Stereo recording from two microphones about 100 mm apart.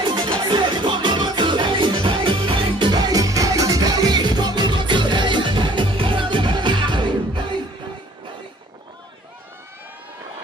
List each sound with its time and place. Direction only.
0.0 s music: 50° right (ahead or behind)